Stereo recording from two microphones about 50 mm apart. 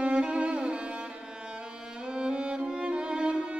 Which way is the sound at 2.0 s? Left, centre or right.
Centre.